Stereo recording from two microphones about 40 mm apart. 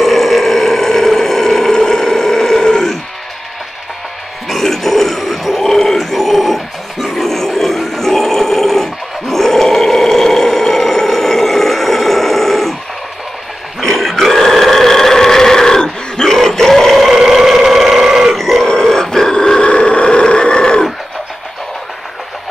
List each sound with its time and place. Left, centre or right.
0.0 s burping: centre
4.5 s grunt: centre
13.7 s burping: centre
17.1 s burping: centre
18.4 s grunt: centre